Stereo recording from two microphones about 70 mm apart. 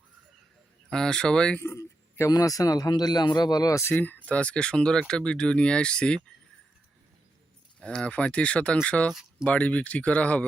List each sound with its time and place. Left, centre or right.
0.9 s speech: centre
1.7 s speech: left
3.9 s speech: left
7.8 s speech: centre